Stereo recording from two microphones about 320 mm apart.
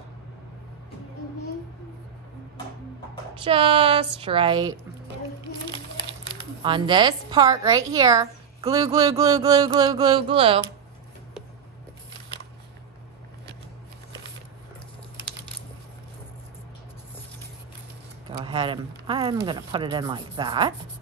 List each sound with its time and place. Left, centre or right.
3.4 s a woman's voice: centre
6.6 s a woman's voice: centre
18.3 s speech: centre